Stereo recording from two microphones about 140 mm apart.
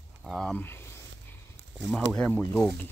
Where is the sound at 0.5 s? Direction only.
15° left (ahead or behind).